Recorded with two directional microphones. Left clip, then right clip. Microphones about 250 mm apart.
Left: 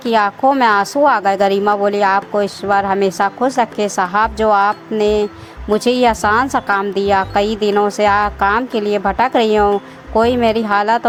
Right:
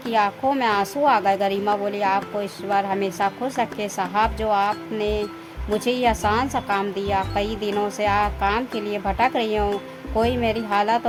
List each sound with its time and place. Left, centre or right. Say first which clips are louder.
0.0 s speech: left 7 dB; centre